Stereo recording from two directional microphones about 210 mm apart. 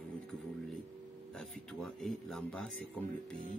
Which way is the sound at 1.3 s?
Centre (ahead or behind).